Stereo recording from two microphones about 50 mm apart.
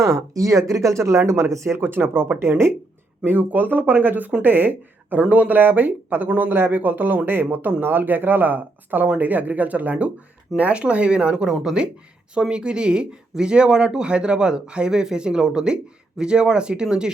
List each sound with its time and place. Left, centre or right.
0.0 s speech: right
1.7 s speech: right
2.4 s speech: right
3.2 s speech: right
10.6 s speech: right